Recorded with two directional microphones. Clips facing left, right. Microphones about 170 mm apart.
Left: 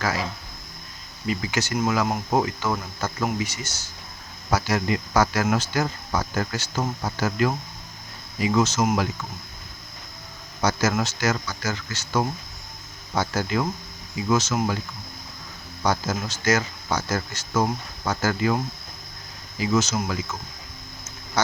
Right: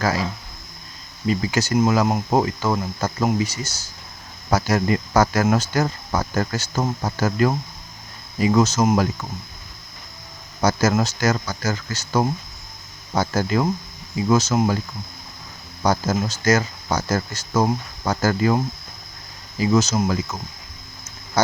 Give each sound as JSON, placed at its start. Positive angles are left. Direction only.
{"t": 1.3, "sound": "speech", "side_deg": -35}
{"t": 10.6, "sound": "speech", "side_deg": -40}
{"t": 15.8, "sound": "speech", "side_deg": -40}
{"t": 21.4, "sound": "a sound", "side_deg": -35}